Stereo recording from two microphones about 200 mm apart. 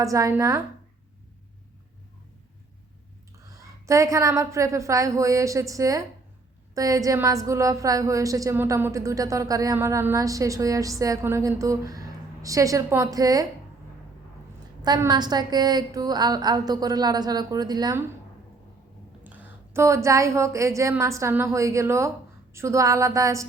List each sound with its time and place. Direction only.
0.0 s a woman's voice: 15° right (ahead or behind)
3.4 s a woman's voice: 15° right (ahead or behind)
14.8 s a woman's voice: 20° right (ahead or behind)
19.2 s a woman's voice: 10° right (ahead or behind)